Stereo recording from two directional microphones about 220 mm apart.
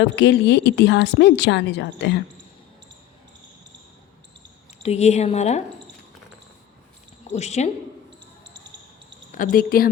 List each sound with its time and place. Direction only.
0.0 s a woman's voice: 55° left (ahead or behind)
4.8 s speech: 30° left (ahead or behind)
7.3 s speech: 30° left (ahead or behind)
9.3 s speech: 40° left (ahead or behind)